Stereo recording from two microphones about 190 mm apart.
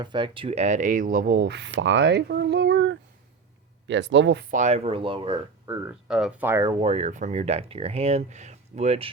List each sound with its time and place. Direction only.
0.0 s speech: 25° right (ahead or behind); by 4.4 s 70° right (ahead or behind)
4.5 s speech: 35° right (ahead or behind)
5.6 s speech: 10° right (ahead or behind)
6.7 s speech: 35° right (ahead or behind)